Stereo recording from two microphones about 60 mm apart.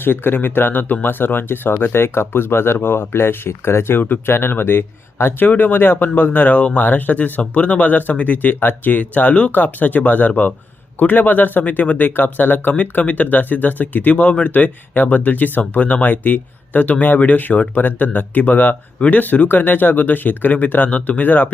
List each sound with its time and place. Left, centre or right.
0.0 s speech: left
18.9 s speech: centre
19.2 s speech: left